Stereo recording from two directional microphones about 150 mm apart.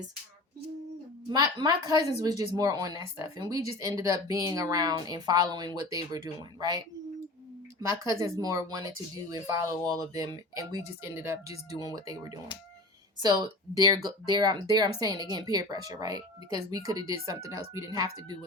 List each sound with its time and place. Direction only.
1.3 s speech: 25° right (ahead or behind)